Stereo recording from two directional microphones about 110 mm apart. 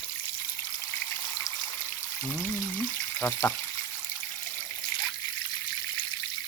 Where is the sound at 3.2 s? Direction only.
20° left (ahead or behind).